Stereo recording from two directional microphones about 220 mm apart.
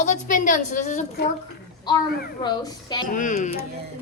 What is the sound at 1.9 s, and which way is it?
Speech, 20° left (ahead or behind).